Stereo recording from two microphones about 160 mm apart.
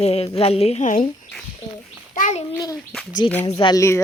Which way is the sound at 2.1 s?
50° left (ahead or behind).